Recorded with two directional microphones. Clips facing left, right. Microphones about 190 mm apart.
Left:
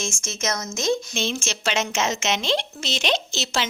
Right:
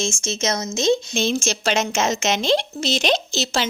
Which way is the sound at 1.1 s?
40° right (ahead or behind).